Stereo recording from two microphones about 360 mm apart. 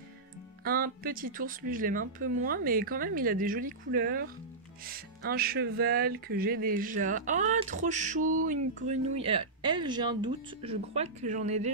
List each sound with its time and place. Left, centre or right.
0.7 s music: right